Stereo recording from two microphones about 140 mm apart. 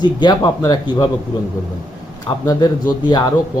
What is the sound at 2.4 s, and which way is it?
Speech, 30° left (ahead or behind).